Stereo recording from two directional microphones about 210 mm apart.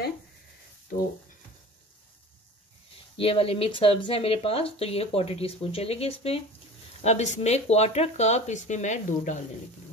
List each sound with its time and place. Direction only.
3.2 s speech: 25° left (ahead or behind)